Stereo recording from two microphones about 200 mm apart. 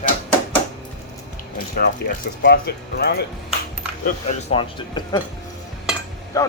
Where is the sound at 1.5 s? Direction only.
50° left (ahead or behind).